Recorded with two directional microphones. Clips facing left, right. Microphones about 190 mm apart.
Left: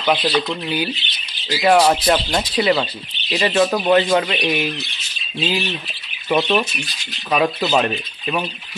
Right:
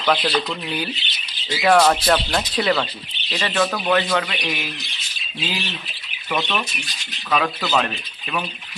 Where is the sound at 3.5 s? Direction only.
30° left (ahead or behind).